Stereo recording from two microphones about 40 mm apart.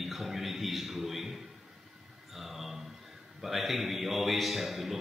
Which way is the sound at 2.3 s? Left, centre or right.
Centre.